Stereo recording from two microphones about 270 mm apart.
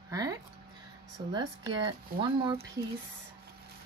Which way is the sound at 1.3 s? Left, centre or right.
Centre.